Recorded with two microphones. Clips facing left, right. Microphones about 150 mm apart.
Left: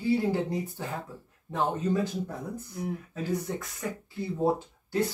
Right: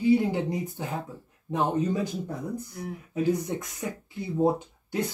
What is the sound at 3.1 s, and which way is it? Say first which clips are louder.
Speech: right 8 dB; 15° right (ahead or behind).